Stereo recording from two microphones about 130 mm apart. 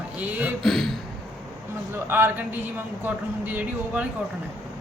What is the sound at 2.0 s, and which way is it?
Speech, 15° right (ahead or behind).